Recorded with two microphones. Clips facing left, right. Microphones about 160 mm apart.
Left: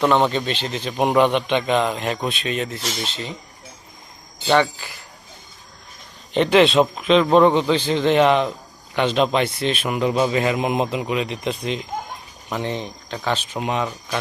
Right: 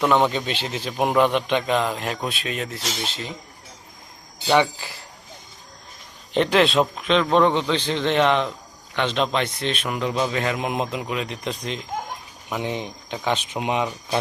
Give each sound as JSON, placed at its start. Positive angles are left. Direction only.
{"t": 0.0, "sound": "a man's voice", "side_deg": -5}
{"t": 4.4, "sound": "speech", "side_deg": -15}
{"t": 6.3, "sound": "a man's voice", "side_deg": 0}
{"t": 12.5, "sound": "speech", "side_deg": -10}